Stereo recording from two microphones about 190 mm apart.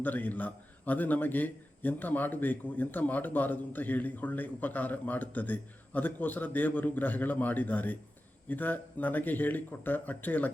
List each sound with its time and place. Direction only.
0.0 s a man's voice: 10° left (ahead or behind)